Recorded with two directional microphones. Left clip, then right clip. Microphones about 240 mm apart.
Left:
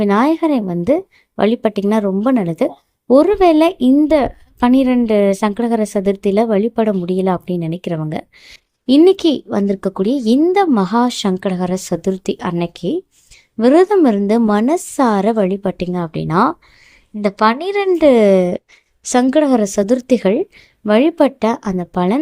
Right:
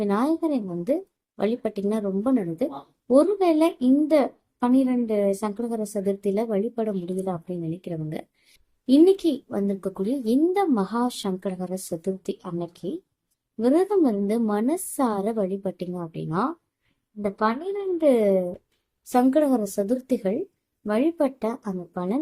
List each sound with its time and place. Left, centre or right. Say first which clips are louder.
0.0 s a woman's voice: left 10 dB; left